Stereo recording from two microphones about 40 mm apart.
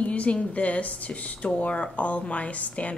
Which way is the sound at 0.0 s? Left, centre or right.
Left.